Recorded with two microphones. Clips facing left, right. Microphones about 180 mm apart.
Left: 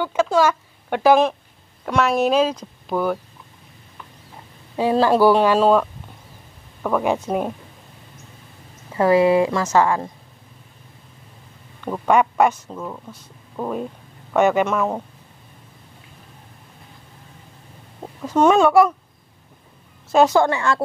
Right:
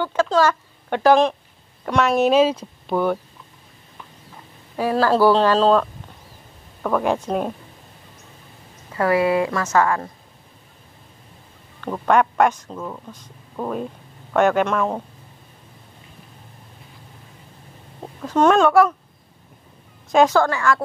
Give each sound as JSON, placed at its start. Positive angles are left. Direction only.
{"t": 0.0, "sound": "speech", "side_deg": 10}
{"t": 4.7, "sound": "speech", "side_deg": 20}
{"t": 8.9, "sound": "a woman's voice", "side_deg": 20}
{"t": 11.8, "sound": "speech", "side_deg": 10}
{"t": 18.0, "sound": "speech", "side_deg": 10}
{"t": 20.1, "sound": "a woman's voice", "side_deg": 5}
{"t": 20.3, "sound": "a woman's voice", "side_deg": 25}